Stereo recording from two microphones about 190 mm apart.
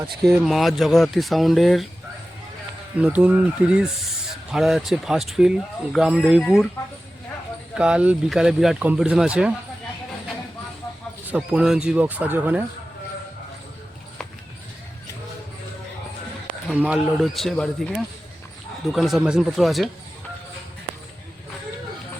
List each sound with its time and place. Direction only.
0.2 s speech: centre (ahead or behind)
3.0 s speech: 10° right (ahead or behind)
7.8 s speech: 5° right (ahead or behind)
11.3 s speech: 5° right (ahead or behind)
16.6 s speech: 5° right (ahead or behind)